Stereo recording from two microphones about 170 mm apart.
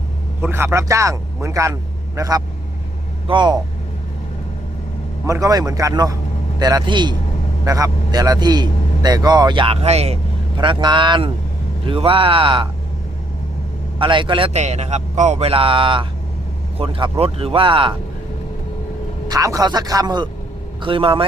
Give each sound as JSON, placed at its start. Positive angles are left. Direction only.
{"t": 0.4, "sound": "a man's voice", "side_deg": -15}
{"t": 5.2, "sound": "a man's voice", "side_deg": -20}
{"t": 10.6, "sound": "a man's voice", "side_deg": -25}
{"t": 14.0, "sound": "a man's voice", "side_deg": -30}
{"t": 19.3, "sound": "a man's voice", "side_deg": -20}